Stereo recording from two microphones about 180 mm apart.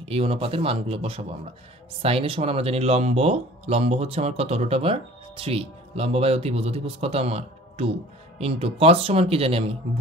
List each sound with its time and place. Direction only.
0.0 s speech: 30° right (ahead or behind)